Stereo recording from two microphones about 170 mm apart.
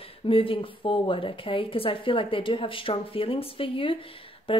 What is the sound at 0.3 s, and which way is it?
A woman's voice, 30° left (ahead or behind).